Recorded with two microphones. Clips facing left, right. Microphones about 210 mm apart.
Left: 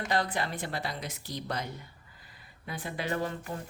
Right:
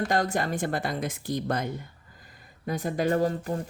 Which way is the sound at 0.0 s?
45° right (ahead or behind).